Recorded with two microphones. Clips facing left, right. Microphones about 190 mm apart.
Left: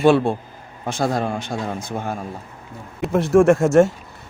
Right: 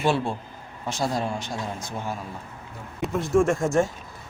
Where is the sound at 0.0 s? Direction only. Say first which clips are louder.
Left 9 dB; 55° left (ahead or behind).